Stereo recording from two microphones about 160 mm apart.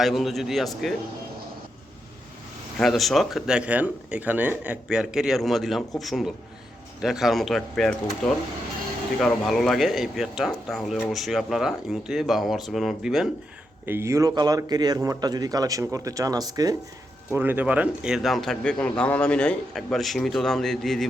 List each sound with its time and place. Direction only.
0.0 s speech: centre (ahead or behind)
2.7 s speech: centre (ahead or behind)
13.8 s speech: 15° right (ahead or behind)
17.3 s speech: 15° right (ahead or behind)